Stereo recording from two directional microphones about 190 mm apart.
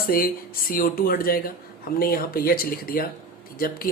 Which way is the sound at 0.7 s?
50° left (ahead or behind).